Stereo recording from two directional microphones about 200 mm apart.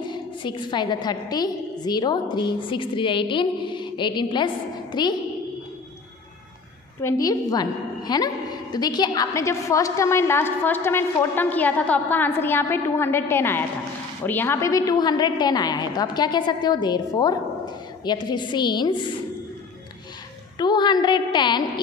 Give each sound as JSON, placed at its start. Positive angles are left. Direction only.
{"t": 0.0, "sound": "a woman's voice", "side_deg": 25}
{"t": 7.0, "sound": "a woman's voice", "side_deg": 15}
{"t": 20.5, "sound": "a woman's voice", "side_deg": 20}